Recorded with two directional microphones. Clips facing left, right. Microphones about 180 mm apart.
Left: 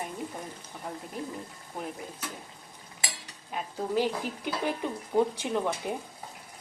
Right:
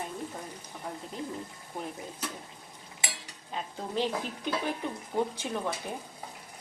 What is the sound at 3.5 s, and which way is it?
Speech, 10° left (ahead or behind).